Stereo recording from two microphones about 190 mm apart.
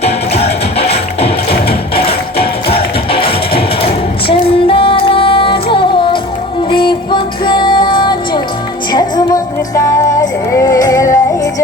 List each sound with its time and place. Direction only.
0.0 s music: 35° left (ahead or behind); by 11.2 s 15° left (ahead or behind)